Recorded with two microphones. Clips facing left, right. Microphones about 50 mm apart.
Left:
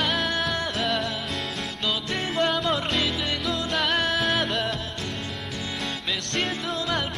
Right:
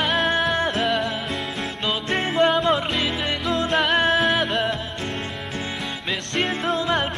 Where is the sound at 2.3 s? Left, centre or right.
Right.